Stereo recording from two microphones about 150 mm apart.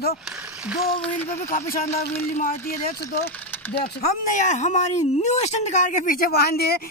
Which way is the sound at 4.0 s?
55° left (ahead or behind).